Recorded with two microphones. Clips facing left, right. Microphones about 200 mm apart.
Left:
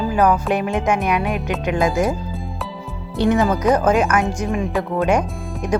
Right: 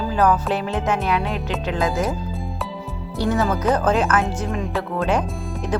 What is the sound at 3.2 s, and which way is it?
Speech, 15° left (ahead or behind).